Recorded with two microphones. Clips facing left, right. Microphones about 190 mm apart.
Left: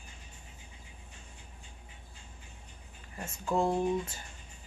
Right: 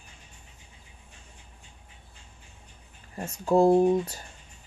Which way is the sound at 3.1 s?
35° right (ahead or behind).